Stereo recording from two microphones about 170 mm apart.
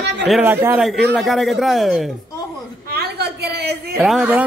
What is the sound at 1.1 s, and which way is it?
Speech, centre (ahead or behind).